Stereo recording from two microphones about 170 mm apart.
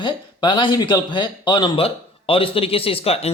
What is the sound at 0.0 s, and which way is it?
A man's voice, 25° left (ahead or behind).